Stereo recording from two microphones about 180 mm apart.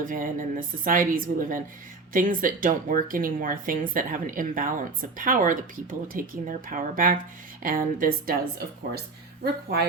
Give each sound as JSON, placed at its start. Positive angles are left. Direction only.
{"t": 0.0, "sound": "speech", "side_deg": -50}